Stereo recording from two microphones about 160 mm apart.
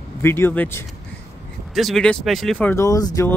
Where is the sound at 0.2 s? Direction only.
15° left (ahead or behind).